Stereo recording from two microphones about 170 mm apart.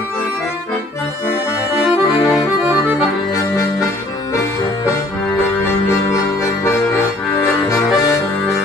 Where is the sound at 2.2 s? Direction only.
5° right (ahead or behind).